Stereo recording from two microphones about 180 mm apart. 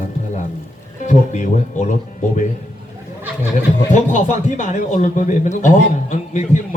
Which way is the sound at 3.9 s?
45° left (ahead or behind).